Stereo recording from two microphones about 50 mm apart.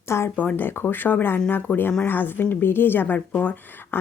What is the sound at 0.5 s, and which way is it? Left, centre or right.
Speech, left.